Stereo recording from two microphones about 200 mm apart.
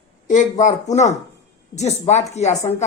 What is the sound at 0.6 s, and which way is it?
Speech, 35° left (ahead or behind).